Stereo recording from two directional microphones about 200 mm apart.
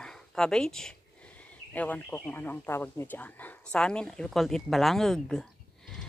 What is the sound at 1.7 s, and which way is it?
Speech, 10° left (ahead or behind).